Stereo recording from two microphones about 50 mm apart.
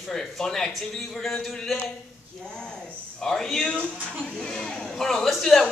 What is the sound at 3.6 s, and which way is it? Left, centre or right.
Speech, left.